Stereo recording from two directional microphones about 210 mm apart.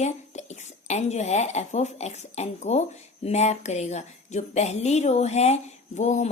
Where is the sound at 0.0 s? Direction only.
35° left (ahead or behind).